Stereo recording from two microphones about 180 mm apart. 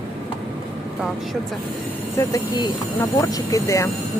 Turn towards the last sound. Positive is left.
turn(degrees=20)  # may be behind; listen again after turning